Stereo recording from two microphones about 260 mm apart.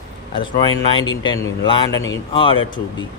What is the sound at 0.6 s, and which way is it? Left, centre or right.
Speech, centre.